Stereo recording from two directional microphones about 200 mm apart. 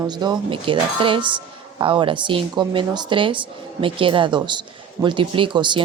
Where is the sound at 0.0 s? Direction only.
20° right (ahead or behind).